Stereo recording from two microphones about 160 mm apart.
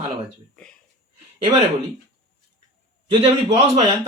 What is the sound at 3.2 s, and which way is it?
Speech, 40° right (ahead or behind).